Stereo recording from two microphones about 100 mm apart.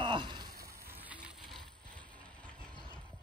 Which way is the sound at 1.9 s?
10° left (ahead or behind).